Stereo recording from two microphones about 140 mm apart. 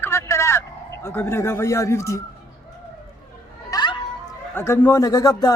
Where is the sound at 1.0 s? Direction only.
15° left (ahead or behind).